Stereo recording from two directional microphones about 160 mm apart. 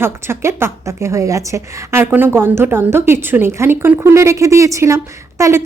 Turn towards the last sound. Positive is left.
turn(degrees=-15)  # may be behind; listen again after turning